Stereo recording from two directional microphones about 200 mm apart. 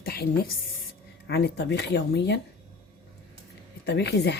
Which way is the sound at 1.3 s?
55° left (ahead or behind).